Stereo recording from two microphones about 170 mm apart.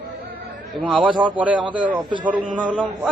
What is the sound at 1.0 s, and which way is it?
Speech, 25° right (ahead or behind).